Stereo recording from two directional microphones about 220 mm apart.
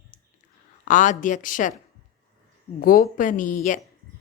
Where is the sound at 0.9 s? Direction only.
35° left (ahead or behind).